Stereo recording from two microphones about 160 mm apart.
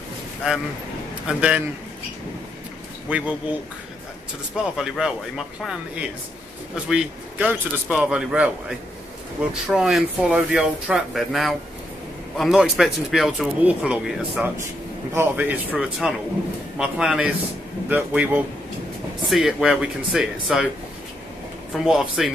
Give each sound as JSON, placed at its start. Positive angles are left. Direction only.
{"t": 1.2, "sound": "a man's voice", "side_deg": -5}
{"t": 3.1, "sound": "a man's voice", "side_deg": -10}
{"t": 4.6, "sound": "a man's voice", "side_deg": -5}
{"t": 21.7, "sound": "speech", "side_deg": -5}